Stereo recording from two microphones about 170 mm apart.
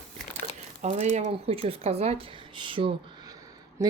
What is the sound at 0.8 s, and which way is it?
Speech, 45° right (ahead or behind).